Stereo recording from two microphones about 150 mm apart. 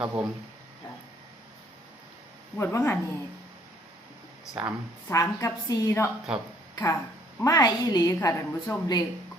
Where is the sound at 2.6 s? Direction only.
15° left (ahead or behind).